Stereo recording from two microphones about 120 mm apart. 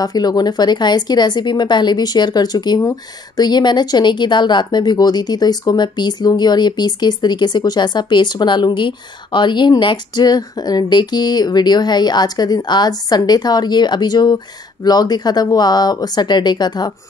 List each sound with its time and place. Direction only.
0.0 s speech: 35° left (ahead or behind)